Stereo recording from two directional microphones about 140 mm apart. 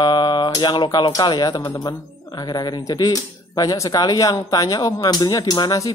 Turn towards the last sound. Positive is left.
turn(degrees=25)  # may be behind; listen again after turning